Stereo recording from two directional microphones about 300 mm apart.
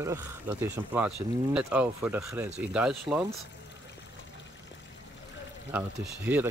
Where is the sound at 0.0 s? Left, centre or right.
Centre.